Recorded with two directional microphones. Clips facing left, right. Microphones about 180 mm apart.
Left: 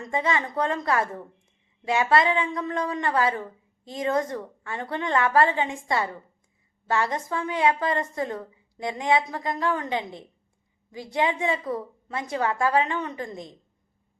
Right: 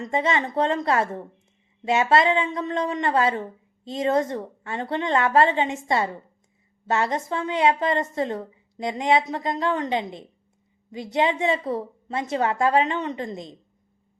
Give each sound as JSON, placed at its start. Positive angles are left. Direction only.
{"t": 0.0, "sound": "a woman's voice", "side_deg": -25}